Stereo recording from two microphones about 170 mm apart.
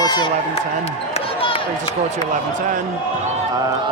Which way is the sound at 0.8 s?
35° left (ahead or behind).